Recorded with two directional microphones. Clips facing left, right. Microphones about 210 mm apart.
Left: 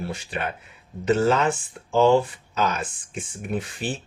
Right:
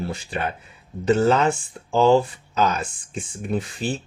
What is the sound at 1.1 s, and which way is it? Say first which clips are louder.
Speech: right 2 dB; 35° right (ahead or behind).